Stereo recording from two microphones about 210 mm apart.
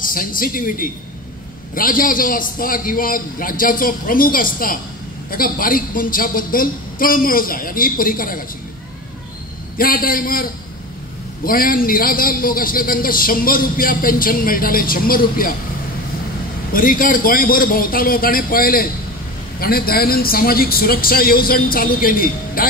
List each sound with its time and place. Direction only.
0.1 s a man's voice: 40° left (ahead or behind)
9.8 s a man's voice: 45° left (ahead or behind)
16.7 s a man's voice: 40° left (ahead or behind)